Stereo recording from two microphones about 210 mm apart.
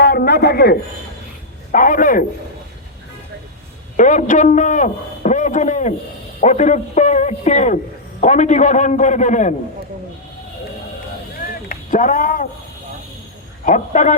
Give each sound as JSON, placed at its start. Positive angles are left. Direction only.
{"t": 0.0, "sound": "a sound", "side_deg": 50}
{"t": 1.7, "sound": "a man's voice", "side_deg": 40}
{"t": 3.9, "sound": "a man's voice", "side_deg": 35}
{"t": 11.3, "sound": "rowboat", "side_deg": 40}
{"t": 13.7, "sound": "a man's voice", "side_deg": 35}